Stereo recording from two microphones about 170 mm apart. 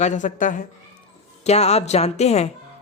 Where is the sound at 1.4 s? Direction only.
40° left (ahead or behind).